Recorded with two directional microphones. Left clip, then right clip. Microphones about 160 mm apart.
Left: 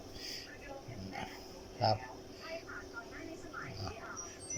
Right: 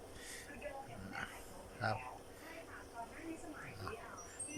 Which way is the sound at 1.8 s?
10° left (ahead or behind).